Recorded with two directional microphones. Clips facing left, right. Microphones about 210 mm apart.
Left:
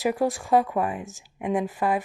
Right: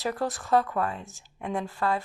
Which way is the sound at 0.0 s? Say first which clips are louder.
Left 6 dB; 15° left (ahead or behind).